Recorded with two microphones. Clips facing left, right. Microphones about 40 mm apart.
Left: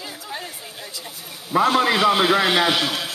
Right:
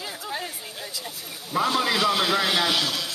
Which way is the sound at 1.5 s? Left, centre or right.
Left.